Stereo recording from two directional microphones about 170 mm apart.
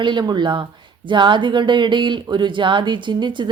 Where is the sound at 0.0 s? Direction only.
25° right (ahead or behind).